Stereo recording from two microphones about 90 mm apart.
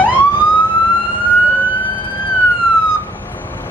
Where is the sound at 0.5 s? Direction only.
65° left (ahead or behind).